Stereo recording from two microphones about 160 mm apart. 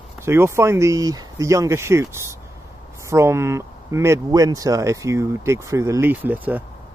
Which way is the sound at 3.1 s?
15° right (ahead or behind).